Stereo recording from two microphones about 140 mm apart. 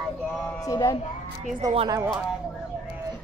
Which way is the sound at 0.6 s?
25° left (ahead or behind).